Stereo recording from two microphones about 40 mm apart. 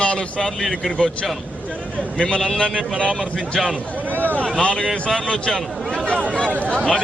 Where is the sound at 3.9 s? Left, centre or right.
Right.